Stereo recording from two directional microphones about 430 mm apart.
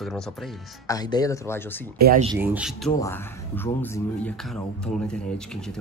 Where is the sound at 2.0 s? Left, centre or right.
Centre.